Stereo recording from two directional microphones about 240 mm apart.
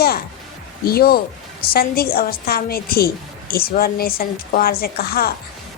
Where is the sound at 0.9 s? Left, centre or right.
Left.